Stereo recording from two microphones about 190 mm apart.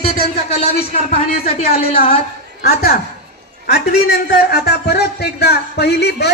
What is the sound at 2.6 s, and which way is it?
A woman's voice, 55° left (ahead or behind).